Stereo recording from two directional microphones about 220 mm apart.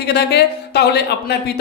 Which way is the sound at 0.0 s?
50° left (ahead or behind).